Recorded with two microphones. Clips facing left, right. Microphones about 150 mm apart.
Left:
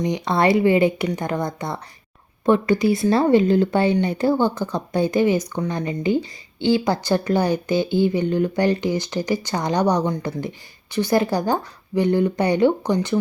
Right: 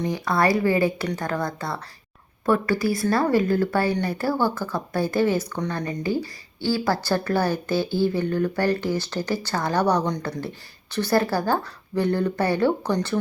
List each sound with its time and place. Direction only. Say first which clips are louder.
0.0 s speech: left 3 dB; 20° left (ahead or behind)